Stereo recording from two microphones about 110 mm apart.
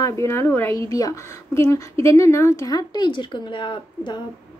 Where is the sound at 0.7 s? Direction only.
30° left (ahead or behind).